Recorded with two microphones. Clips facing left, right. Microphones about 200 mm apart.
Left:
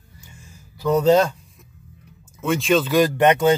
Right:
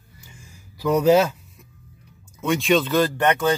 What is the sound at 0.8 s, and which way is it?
Speech, 10° right (ahead or behind).